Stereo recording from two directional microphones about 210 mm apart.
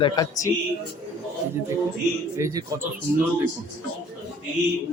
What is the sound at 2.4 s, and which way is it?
Speech, 15° right (ahead or behind).